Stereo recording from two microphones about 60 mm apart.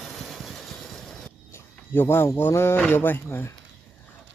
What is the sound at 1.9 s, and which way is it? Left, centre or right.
Speech, left.